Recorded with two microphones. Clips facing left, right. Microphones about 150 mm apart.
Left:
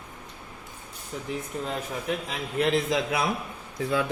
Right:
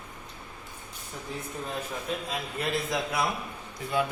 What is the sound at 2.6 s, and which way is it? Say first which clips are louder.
Speech: left 7 dB; 85° left.